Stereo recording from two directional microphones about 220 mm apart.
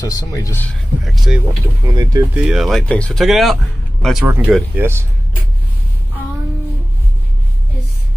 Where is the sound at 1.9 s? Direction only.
15° right (ahead or behind).